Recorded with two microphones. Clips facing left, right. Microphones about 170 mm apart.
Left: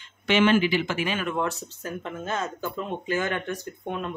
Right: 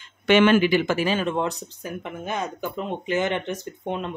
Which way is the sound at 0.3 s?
55° right (ahead or behind).